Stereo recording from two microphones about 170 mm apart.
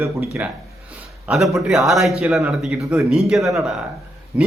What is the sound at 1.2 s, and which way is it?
Speech, centre (ahead or behind).